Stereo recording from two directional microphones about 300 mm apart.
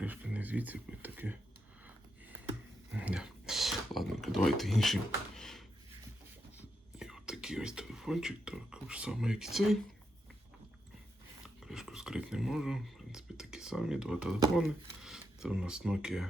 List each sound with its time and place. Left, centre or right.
0.0 s speech: centre
2.9 s speech: centre
5.4 s a sound: centre
7.0 s speech: centre
11.4 s speech: centre